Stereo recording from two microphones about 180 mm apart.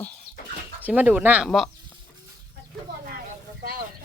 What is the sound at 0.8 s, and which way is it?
Speech, 10° right (ahead or behind).